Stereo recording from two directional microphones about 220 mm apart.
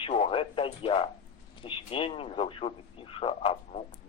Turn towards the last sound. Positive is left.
turn(degrees=25)  # may be behind; listen again after turning